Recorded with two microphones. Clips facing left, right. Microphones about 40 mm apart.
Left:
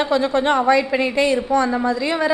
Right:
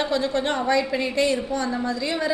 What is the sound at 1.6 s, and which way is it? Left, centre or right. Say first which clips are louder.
Speech: left 6 dB; left.